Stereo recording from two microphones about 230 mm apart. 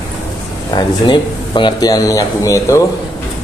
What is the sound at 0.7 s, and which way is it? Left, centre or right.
Speech, centre.